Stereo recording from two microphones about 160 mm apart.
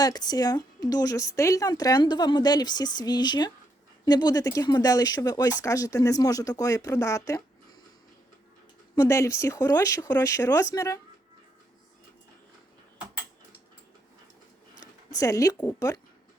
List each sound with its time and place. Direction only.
0.0 s a woman's voice: 25° left (ahead or behind)
9.0 s a woman's voice: 20° left (ahead or behind)
14.8 s speech: 20° left (ahead or behind)